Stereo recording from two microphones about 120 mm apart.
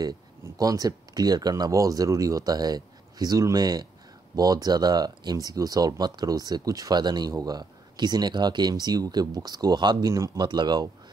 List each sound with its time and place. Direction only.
0.4 s speech: 30° right (ahead or behind)